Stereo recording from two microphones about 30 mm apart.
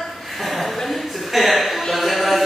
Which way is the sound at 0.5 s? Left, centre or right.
Centre.